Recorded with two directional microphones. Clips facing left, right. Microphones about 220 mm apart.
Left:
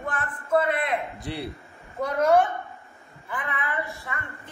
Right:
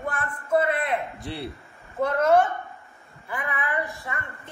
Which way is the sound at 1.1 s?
Centre (ahead or behind).